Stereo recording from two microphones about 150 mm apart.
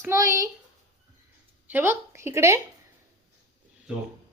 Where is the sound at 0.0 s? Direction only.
20° right (ahead or behind).